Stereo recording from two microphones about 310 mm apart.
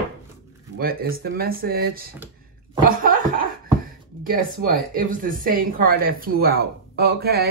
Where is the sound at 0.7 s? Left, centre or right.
Right.